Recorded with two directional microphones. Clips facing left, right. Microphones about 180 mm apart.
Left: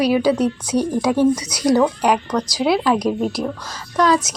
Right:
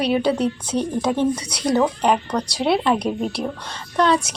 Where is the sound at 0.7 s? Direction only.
10° left (ahead or behind).